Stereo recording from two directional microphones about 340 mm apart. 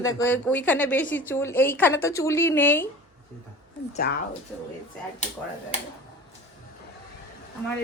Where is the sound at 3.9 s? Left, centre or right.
Left.